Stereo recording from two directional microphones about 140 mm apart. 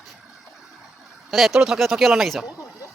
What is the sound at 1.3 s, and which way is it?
Speech, centre (ahead or behind).